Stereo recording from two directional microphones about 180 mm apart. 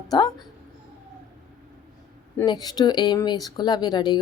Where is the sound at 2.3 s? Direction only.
20° left (ahead or behind).